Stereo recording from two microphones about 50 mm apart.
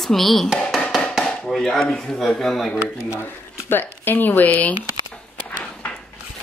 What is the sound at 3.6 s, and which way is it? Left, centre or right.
Speech, left.